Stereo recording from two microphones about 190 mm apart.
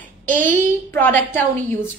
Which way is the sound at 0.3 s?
45° right (ahead or behind).